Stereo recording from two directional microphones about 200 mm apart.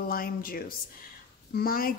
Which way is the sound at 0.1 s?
45° left (ahead or behind).